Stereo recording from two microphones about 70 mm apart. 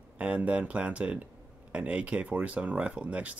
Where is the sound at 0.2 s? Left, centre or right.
Centre.